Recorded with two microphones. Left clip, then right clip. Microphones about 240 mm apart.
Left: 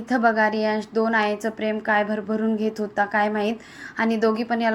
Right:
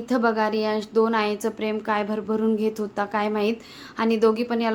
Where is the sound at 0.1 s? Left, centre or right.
Centre.